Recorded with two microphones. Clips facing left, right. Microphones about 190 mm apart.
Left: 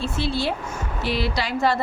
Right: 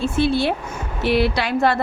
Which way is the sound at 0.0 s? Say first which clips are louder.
Right 6 dB; 55° right (ahead or behind).